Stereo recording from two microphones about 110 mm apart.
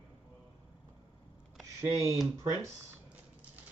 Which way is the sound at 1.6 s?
30° right (ahead or behind).